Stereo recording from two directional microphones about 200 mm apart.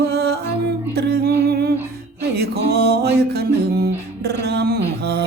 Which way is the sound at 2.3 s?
55° right (ahead or behind).